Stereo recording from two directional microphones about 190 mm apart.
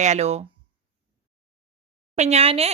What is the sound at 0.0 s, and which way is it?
Speech, 35° right (ahead or behind).